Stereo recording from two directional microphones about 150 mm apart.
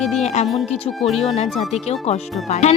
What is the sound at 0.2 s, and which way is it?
Speech, 50° left (ahead or behind).